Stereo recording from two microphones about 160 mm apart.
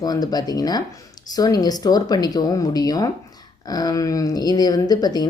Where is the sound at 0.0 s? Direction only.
25° left (ahead or behind).